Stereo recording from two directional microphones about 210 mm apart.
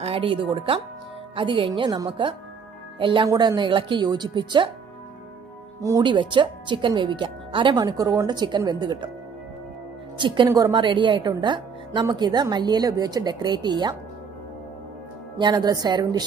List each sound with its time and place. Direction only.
0.0 s a woman's voice: 25° right (ahead or behind)
5.8 s a woman's voice: 15° right (ahead or behind)
10.1 s a woman's voice: 25° right (ahead or behind)
15.3 s a woman's voice: 20° right (ahead or behind)